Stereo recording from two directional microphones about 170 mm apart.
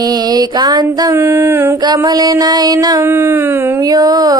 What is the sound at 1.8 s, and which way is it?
Music, 25° right (ahead or behind).